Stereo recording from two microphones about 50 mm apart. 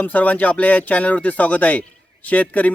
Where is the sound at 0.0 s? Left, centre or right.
Left.